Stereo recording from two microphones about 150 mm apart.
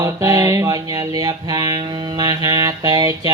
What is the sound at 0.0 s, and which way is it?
Mantra, 25° right (ahead or behind).